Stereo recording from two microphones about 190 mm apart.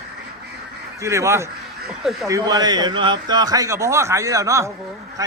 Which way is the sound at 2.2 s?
20° right (ahead or behind).